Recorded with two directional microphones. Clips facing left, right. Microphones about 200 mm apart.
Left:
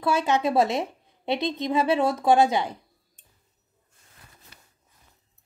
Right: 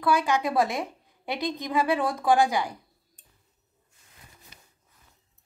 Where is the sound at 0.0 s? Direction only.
25° left (ahead or behind).